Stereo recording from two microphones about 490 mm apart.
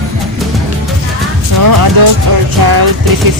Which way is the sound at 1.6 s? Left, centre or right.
Right.